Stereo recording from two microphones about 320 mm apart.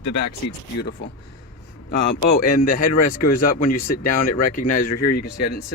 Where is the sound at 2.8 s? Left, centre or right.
Left.